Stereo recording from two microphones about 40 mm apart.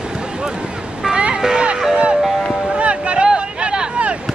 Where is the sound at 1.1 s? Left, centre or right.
Right.